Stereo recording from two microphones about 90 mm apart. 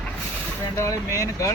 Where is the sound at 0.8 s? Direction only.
35° left (ahead or behind).